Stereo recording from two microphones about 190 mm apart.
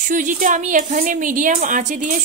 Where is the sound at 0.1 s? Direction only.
40° right (ahead or behind).